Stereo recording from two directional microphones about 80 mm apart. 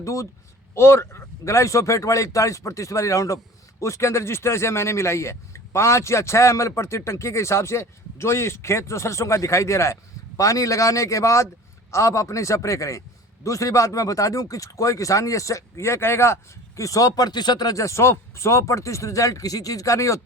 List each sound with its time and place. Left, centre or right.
0.0 s speech: left